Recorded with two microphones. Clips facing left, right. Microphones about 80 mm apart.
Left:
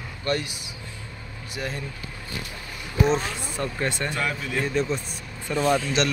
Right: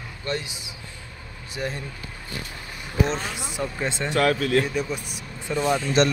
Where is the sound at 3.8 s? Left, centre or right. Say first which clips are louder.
Left 1 dB; centre.